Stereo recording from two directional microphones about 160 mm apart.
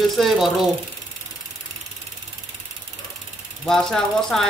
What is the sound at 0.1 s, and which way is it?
Speech, centre (ahead or behind).